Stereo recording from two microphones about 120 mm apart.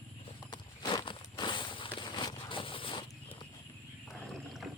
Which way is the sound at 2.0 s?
40° left (ahead or behind).